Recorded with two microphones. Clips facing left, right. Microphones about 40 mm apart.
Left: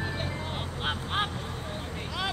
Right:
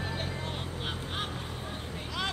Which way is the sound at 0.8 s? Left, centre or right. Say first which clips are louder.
Left 8 dB; left.